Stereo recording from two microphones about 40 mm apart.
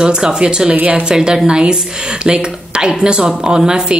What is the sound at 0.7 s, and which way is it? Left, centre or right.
Speech, right.